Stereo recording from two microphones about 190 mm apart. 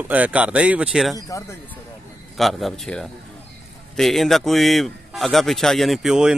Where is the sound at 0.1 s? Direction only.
5° right (ahead or behind).